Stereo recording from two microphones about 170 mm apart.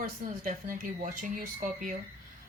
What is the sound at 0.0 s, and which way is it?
A woman's voice, 55° right (ahead or behind).